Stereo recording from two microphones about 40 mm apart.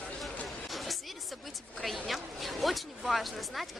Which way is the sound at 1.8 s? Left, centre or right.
Centre.